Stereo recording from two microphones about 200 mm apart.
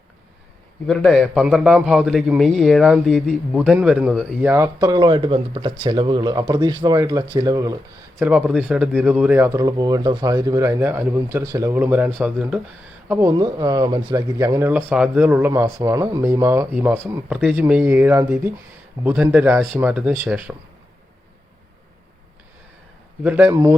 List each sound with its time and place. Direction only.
0.9 s a man's voice: centre (ahead or behind); by 7.8 s 15° right (ahead or behind)
8.1 s speech: 5° right (ahead or behind)
23.2 s speech: 10° right (ahead or behind)